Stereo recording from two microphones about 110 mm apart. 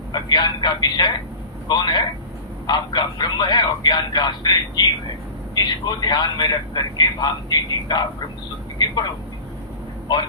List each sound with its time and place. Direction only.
0.1 s a man's voice: 40° left (ahead or behind)
10.1 s a man's voice: 40° left (ahead or behind)